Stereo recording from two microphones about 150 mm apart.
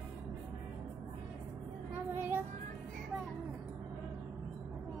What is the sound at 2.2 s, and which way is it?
Child singing, 15° right (ahead or behind).